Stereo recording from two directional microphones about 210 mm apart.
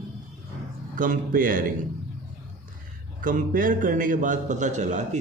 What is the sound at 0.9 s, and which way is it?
Speech, 40° right (ahead or behind).